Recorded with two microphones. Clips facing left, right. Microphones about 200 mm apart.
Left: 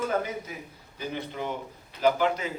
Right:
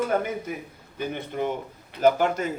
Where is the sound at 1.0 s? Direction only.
55° right (ahead or behind).